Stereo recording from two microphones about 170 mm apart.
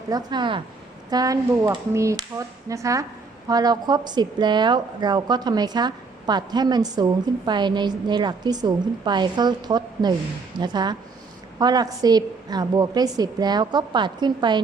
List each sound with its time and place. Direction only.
0.1 s a woman's voice: 25° right (ahead or behind)